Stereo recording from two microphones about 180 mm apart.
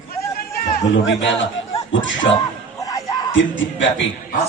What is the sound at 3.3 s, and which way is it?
Speech, 90° left.